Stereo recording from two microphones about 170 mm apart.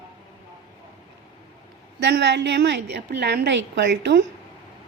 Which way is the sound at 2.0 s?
90° right.